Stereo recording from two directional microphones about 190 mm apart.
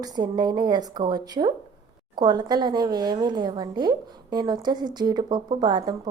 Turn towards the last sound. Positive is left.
turn(degrees=-20)  # may be behind; listen again after turning